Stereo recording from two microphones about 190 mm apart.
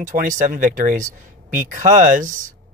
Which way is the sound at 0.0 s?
45° right (ahead or behind).